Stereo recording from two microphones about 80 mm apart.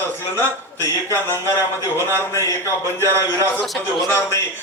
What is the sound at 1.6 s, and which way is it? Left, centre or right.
Speech, right.